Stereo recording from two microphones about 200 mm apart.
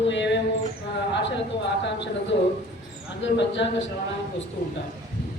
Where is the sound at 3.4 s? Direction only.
65° left (ahead or behind).